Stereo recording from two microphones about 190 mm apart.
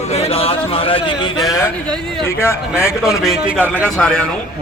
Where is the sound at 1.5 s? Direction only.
15° left (ahead or behind).